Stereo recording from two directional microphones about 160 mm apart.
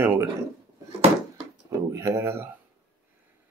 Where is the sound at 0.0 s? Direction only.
15° right (ahead or behind).